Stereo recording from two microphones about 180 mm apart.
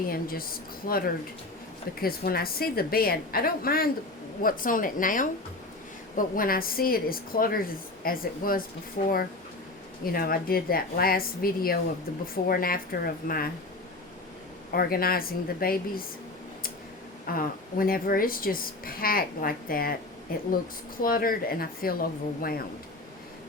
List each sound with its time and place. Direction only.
0.1 s a woman's voice: 55° left (ahead or behind)
14.7 s a woman's voice: 55° left (ahead or behind)
17.2 s a woman's voice: 50° left (ahead or behind)